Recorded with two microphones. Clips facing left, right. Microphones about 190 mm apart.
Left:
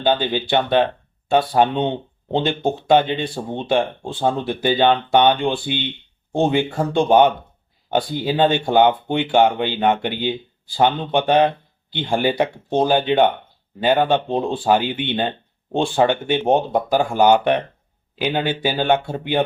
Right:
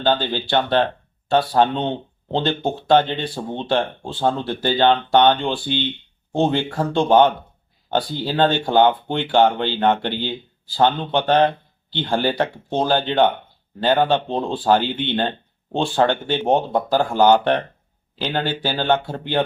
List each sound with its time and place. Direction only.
0.0 s speech: 15° left (ahead or behind)